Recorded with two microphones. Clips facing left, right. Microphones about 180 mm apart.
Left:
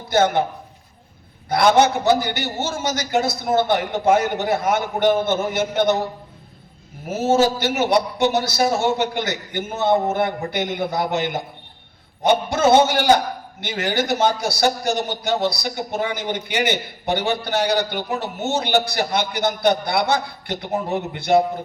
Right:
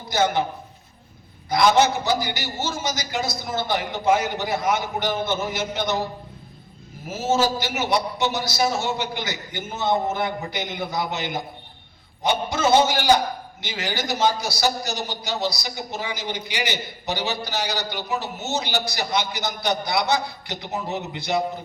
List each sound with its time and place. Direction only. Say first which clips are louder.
0.1 s a man's voice: left 4 dB; 55° left (ahead or behind)
1.5 s a man's voice: left 2 dB; 55° left (ahead or behind)
7.1 s a man's voice: left 4 dB; 60° left (ahead or behind)